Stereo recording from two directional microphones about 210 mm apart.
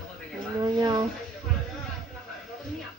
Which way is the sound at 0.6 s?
20° right (ahead or behind).